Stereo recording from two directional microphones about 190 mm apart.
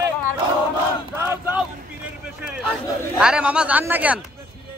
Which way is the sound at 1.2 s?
10° right (ahead or behind).